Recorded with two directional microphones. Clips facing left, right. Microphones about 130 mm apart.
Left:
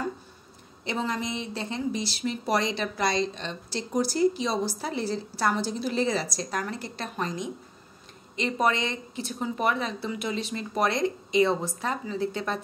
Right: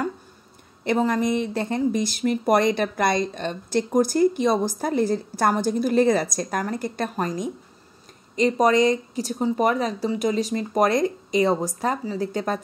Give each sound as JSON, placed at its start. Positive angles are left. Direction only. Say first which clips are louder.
{"t": 0.8, "sound": "a woman's voice", "louder": "right 9 dB", "side_deg": -50}